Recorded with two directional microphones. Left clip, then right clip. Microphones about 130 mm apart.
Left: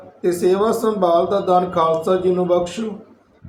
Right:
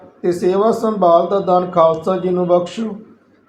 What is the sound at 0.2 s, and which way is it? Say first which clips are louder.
Speech: right 2 dB; 45° right (ahead or behind).